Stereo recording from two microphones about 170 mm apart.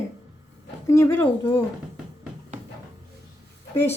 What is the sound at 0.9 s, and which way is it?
Speech, 15° left (ahead or behind).